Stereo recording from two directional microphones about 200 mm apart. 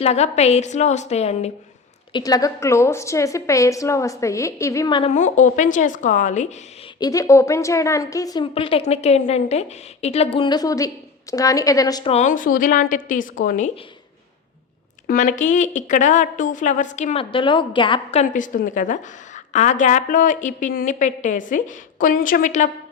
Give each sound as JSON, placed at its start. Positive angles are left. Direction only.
{"t": 0.0, "sound": "a woman's voice", "side_deg": 35}
{"t": 2.1, "sound": "a woman's voice", "side_deg": 20}
{"t": 5.1, "sound": "a woman's voice", "side_deg": 35}
{"t": 7.0, "sound": "a woman's voice", "side_deg": 15}
{"t": 12.1, "sound": "a woman's voice", "side_deg": 40}
{"t": 15.0, "sound": "a woman's voice", "side_deg": 40}